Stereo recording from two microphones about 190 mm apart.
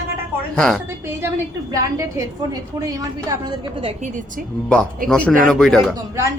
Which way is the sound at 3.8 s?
40° right (ahead or behind).